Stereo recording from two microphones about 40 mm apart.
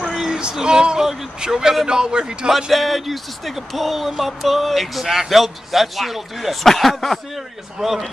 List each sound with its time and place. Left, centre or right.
0.3 s a man's voice: centre
2.7 s a man's voice: centre